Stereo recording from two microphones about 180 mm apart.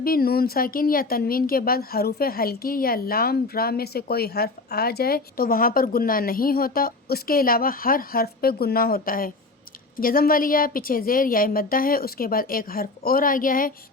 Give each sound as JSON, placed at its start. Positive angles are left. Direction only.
{"t": 0.0, "sound": "a woman's voice", "side_deg": 55}